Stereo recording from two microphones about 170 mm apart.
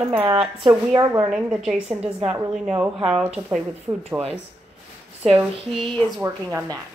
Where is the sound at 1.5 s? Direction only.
5° right (ahead or behind).